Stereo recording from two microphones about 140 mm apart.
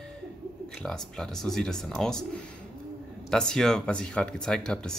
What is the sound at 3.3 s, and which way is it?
Speech, 5° left (ahead or behind).